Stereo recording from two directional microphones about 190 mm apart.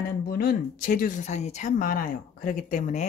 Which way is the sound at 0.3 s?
50° left (ahead or behind).